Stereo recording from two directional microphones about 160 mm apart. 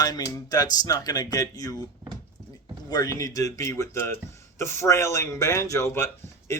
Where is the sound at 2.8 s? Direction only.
25° left (ahead or behind).